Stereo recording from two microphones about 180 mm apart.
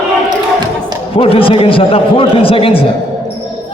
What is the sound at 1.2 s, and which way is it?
A man's voice, 30° left (ahead or behind).